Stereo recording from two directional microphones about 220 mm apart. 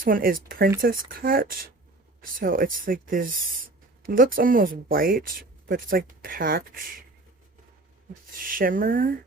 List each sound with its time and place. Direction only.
0.0 s speech: 40° right (ahead or behind)
8.3 s speech: 40° right (ahead or behind)